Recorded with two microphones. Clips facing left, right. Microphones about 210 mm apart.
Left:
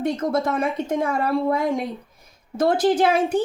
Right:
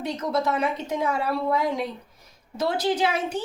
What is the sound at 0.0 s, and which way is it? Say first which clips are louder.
Speech: left 4 dB; 50° left (ahead or behind).